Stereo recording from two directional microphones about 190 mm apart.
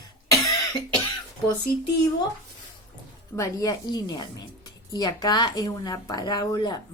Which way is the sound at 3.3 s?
15° left (ahead or behind).